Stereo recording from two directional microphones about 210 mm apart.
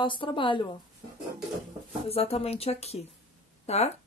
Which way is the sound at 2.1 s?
30° left (ahead or behind).